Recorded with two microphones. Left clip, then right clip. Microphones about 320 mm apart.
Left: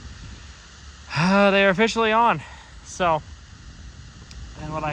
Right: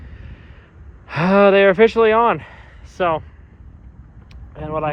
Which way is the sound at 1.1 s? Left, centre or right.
Centre.